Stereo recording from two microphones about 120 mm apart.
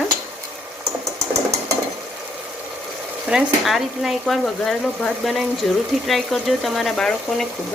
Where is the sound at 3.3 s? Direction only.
5° right (ahead or behind).